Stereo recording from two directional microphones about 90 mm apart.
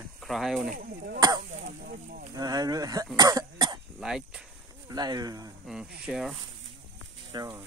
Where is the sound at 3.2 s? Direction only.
45° right (ahead or behind).